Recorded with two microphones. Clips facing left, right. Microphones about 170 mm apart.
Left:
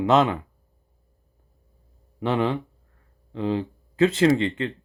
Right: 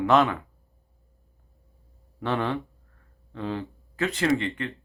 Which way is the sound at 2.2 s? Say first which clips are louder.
Left 4 dB; 20° left (ahead or behind).